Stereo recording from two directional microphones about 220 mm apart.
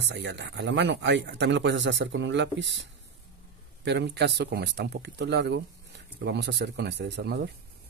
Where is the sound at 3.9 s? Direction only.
50° right (ahead or behind).